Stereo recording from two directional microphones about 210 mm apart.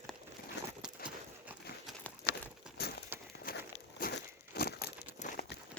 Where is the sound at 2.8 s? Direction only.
50° left (ahead or behind).